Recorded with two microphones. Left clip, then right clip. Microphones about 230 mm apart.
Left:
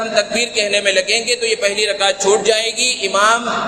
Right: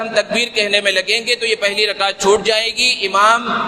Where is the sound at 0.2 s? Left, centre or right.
Right.